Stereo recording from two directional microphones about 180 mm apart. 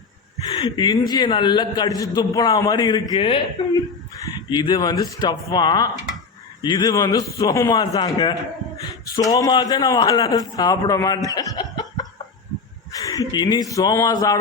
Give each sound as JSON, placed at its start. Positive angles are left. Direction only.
{"t": 0.3, "sound": "a man's voice", "side_deg": 25}